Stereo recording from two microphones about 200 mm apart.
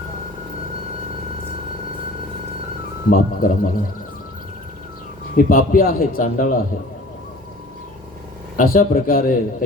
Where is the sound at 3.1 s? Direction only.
45° left (ahead or behind).